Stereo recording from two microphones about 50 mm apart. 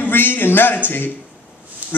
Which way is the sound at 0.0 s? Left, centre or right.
Left.